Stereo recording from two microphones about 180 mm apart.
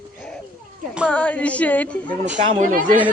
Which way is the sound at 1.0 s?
5° left (ahead or behind).